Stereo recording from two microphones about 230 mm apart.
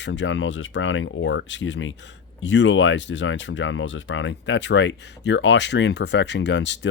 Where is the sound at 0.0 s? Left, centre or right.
Left.